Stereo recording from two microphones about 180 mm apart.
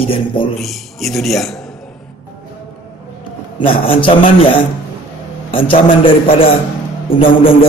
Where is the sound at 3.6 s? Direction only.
30° left (ahead or behind).